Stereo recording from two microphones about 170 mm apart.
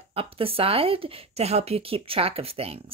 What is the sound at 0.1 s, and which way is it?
Speech, 35° right (ahead or behind).